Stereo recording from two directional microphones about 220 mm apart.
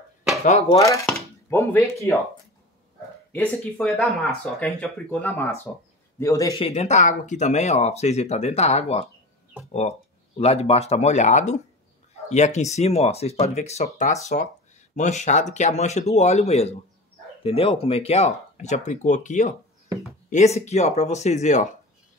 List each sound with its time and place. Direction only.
0.5 s speech: 30° left (ahead or behind)
0.7 s speech: 15° left (ahead or behind)
3.3 s speech: 5° left (ahead or behind); by 21.7 s 35° left (ahead or behind)